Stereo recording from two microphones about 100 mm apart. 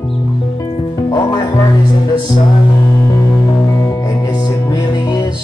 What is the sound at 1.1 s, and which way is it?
Music, 30° left (ahead or behind).